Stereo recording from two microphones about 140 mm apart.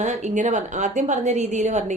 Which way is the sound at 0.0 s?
55° right (ahead or behind).